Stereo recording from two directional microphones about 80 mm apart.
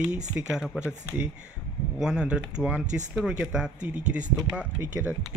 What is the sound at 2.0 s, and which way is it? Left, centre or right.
Speech, centre.